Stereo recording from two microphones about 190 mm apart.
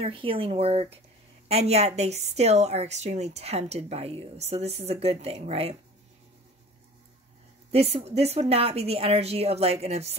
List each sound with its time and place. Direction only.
0.0 s a woman's voice: 30° right (ahead or behind)
7.7 s a woman's voice: 35° right (ahead or behind)